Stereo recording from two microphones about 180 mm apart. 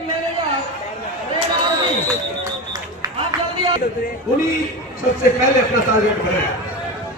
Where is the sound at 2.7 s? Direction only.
20° right (ahead or behind).